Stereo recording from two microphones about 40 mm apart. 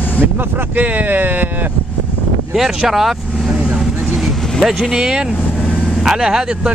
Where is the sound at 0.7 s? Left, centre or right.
Right.